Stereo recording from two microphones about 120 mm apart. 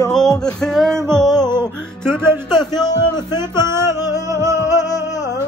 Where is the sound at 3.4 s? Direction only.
20° right (ahead or behind).